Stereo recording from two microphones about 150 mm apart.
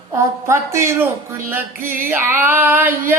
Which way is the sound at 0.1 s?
20° right (ahead or behind).